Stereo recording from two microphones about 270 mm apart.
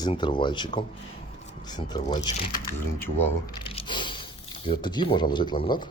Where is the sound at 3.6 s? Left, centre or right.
Centre.